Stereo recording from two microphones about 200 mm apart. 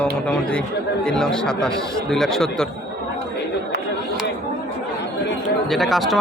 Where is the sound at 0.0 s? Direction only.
5° left (ahead or behind).